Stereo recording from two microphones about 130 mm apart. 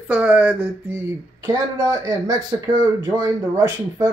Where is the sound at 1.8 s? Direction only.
30° right (ahead or behind).